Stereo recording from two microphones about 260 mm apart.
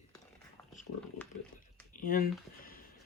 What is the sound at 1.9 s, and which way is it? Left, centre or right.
Speech, left.